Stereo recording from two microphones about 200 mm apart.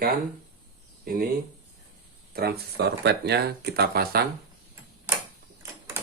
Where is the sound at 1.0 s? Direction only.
50° right (ahead or behind).